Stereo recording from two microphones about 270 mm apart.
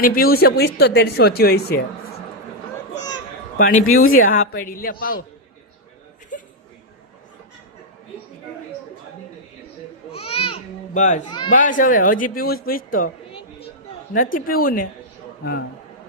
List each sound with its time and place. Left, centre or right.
0.0 s speech: left
3.8 s speech: left
6.3 s chuckle: left
10.1 s baby cry: left
11.5 s speech: left
12.6 s a sound: left
14.1 s speech: left